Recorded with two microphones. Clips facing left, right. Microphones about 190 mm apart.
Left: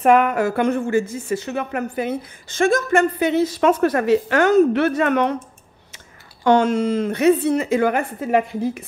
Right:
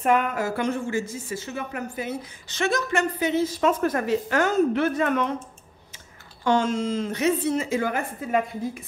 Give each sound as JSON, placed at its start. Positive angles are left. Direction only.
{"t": 0.0, "sound": "speech", "side_deg": 75}
{"t": 6.4, "sound": "speech", "side_deg": 60}